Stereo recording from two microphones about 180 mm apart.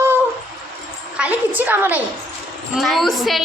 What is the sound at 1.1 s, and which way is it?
Speech, 10° right (ahead or behind).